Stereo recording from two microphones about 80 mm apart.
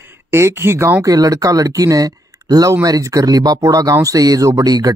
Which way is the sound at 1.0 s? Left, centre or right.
Right.